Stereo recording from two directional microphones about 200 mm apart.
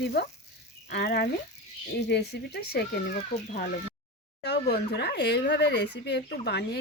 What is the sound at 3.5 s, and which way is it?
Speech, 40° left (ahead or behind).